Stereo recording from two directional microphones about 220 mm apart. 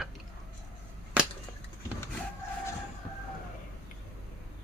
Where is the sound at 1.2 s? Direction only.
5° right (ahead or behind).